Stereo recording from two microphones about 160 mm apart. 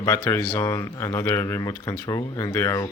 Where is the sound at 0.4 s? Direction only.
20° left (ahead or behind).